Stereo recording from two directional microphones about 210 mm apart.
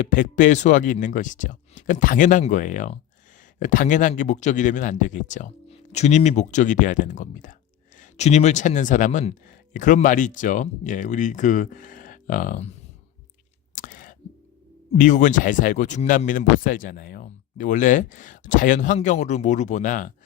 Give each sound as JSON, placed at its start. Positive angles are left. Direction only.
{"t": 0.0, "sound": "speech", "side_deg": 40}
{"t": 13.7, "sound": "a sound", "side_deg": 40}
{"t": 14.9, "sound": "speech", "side_deg": 35}